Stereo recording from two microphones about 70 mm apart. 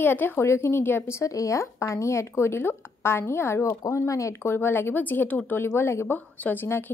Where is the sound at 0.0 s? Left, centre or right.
Left.